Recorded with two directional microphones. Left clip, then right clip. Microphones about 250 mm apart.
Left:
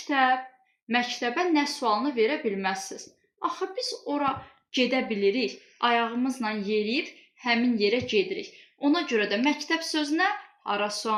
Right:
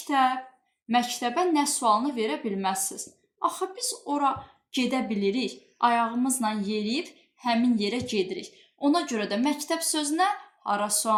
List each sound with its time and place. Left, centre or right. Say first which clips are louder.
0.1 s speech: even; right